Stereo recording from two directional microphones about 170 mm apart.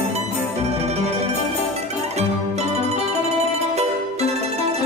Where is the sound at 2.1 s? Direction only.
40° right (ahead or behind).